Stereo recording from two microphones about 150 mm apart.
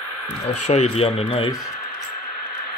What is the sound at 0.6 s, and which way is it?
Speech, 45° left (ahead or behind).